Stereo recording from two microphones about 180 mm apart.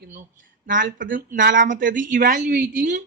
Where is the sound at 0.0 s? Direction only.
55° right (ahead or behind).